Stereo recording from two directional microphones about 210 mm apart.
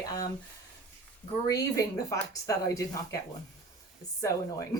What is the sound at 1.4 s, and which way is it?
A woman's voice, 15° left (ahead or behind).